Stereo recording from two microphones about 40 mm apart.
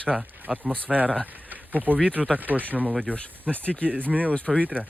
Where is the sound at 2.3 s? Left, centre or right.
Right.